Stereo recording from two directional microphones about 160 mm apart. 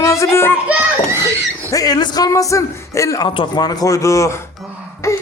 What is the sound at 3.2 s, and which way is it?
Speech, 30° left (ahead or behind).